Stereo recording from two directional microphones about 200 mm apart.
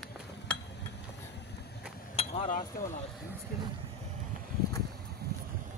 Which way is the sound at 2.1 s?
30° left (ahead or behind).